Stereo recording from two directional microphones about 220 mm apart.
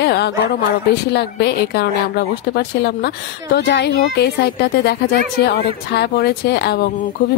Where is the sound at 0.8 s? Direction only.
50° left (ahead or behind).